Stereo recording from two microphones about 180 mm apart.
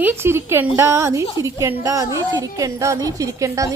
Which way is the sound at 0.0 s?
15° right (ahead or behind).